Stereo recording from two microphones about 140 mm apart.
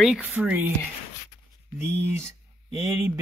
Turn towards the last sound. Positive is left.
turn(degrees=-20)  # may be behind; listen again after turning